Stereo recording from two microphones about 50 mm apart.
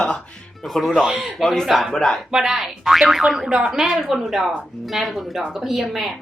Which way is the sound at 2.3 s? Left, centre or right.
Centre.